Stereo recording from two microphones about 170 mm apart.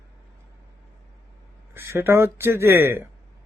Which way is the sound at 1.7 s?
15° right (ahead or behind).